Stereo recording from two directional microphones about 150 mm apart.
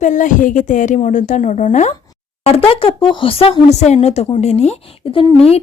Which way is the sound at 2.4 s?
40° left (ahead or behind).